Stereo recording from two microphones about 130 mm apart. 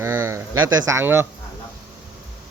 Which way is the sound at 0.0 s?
20° right (ahead or behind).